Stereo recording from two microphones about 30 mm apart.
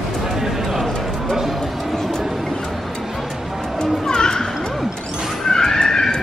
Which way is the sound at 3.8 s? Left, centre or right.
Left.